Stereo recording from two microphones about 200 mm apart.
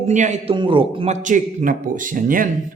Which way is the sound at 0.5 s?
25° right (ahead or behind).